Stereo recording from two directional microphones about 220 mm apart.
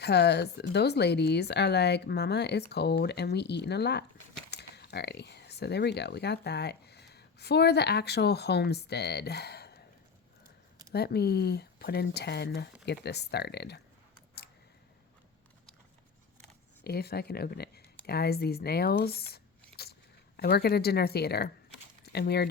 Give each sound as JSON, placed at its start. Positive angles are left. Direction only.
{"t": 0.0, "sound": "speech", "side_deg": 50}
{"t": 10.9, "sound": "speech", "side_deg": 45}
{"t": 16.8, "sound": "speech", "side_deg": 45}